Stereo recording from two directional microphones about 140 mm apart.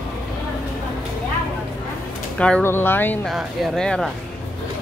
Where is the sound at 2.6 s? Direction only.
15° left (ahead or behind).